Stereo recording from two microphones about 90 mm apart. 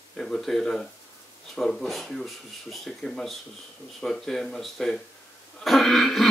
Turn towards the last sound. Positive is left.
turn(degrees=5)  # may be behind; listen again after turning